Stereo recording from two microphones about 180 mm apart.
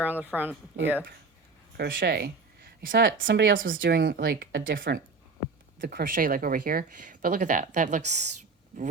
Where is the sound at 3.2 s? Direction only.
90° right.